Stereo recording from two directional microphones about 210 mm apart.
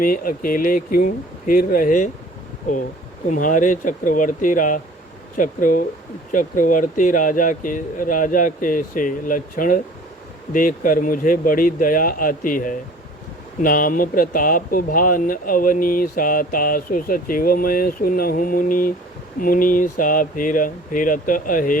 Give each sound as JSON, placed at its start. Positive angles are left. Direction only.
{"t": 0.0, "sound": "speech", "side_deg": 40}
{"t": 3.2, "sound": "speech", "side_deg": 40}